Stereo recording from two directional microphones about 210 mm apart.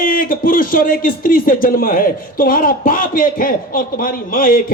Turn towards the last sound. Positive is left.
turn(degrees=45)  # may be behind; listen again after turning